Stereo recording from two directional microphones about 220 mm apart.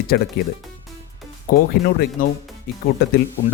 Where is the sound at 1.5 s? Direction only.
40° left (ahead or behind).